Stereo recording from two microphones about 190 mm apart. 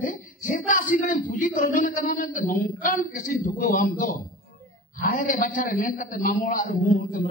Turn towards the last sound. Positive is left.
turn(degrees=45)  # may be behind; listen again after turning